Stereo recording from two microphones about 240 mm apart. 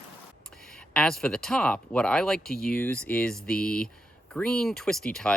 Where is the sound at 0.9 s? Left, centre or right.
Centre.